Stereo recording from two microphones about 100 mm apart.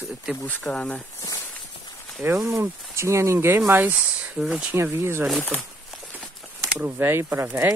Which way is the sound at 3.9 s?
10° right (ahead or behind).